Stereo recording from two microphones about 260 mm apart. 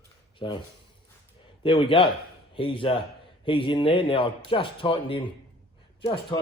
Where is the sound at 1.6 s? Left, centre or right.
Centre.